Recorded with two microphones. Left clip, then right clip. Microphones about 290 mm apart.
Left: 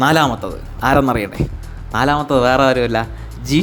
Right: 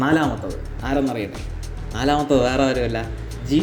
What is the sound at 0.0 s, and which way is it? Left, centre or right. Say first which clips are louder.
Speech: left 6 dB; left.